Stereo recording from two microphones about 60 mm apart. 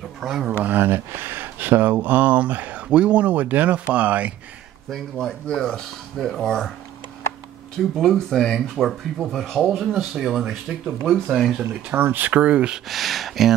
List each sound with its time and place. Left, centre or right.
0.2 s speech: centre
0.7 s speech: right
4.8 s speech: centre
7.9 s speech: centre
11.9 s speech: right
12.8 s speech: centre